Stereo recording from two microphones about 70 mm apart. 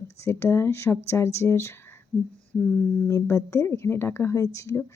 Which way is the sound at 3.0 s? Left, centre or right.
Left.